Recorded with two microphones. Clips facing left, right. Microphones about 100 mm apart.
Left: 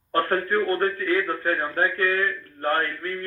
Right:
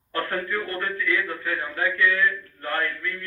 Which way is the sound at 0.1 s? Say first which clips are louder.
Left 5 dB; 45° left (ahead or behind).